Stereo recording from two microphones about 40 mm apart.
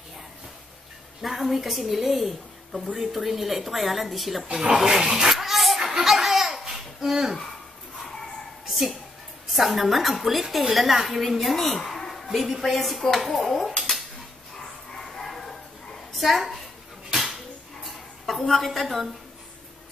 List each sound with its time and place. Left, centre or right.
1.2 s a woman's voice: centre
4.5 s speech: right
4.7 s dog: centre
5.8 s laughter: centre
6.2 s babbling: centre
8.6 s a sound: centre
9.5 s a woman's voice: centre
15.0 s bow-wow: centre
16.1 s a child's voice: centre
18.2 s a woman's voice: centre